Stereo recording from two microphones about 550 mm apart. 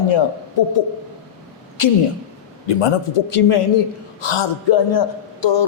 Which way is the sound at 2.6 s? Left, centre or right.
Left.